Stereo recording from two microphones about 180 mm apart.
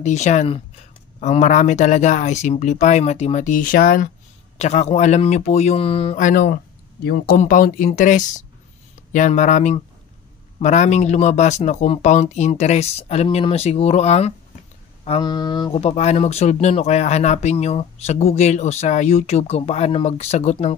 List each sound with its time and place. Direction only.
0.0 s speech: 40° left (ahead or behind)
6.4 s speech: 60° left (ahead or behind); by 20.7 s 40° left (ahead or behind)